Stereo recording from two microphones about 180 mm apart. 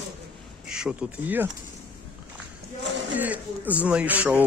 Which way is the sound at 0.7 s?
5° right (ahead or behind).